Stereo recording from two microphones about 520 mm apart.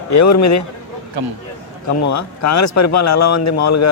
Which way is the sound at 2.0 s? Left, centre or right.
Left.